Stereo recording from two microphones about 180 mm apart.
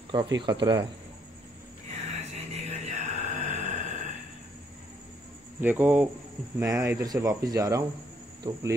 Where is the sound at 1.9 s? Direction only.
40° right (ahead or behind).